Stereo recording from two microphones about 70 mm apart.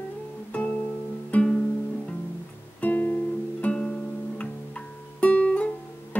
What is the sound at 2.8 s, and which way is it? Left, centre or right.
Guitar, left.